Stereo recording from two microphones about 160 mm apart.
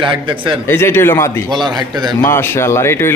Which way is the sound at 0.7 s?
15° left (ahead or behind).